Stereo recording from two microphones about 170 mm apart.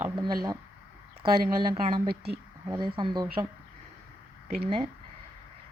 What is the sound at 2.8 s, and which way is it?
Speech, 25° right (ahead or behind).